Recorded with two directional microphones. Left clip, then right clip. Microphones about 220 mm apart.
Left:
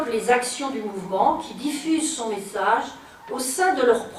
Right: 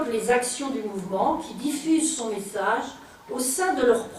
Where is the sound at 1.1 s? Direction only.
25° left (ahead or behind).